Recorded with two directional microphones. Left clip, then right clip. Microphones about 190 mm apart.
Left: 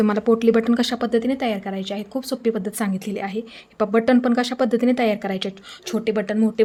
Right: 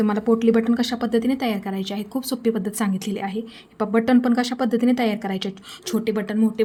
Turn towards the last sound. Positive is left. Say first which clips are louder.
# left 2 dB
turn(degrees=10)  # may be behind; listen again after turning